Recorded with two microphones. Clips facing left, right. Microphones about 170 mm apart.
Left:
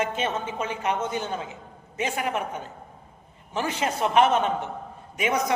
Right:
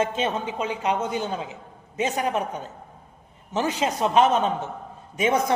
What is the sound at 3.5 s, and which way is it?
Speech, 20° right (ahead or behind).